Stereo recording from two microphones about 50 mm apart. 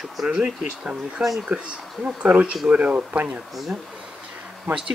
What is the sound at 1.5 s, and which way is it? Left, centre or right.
Speech, right.